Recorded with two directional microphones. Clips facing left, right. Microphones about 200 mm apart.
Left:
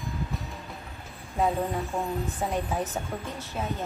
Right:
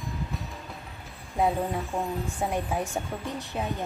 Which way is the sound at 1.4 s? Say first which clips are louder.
Even; 15° right (ahead or behind).